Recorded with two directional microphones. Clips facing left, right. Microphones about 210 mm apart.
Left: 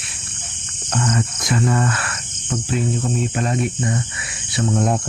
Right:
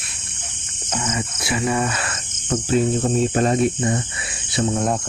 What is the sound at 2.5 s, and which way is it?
Cricket, 40° right (ahead or behind).